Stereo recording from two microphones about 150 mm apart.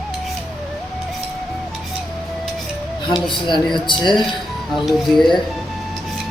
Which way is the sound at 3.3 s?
30° left (ahead or behind).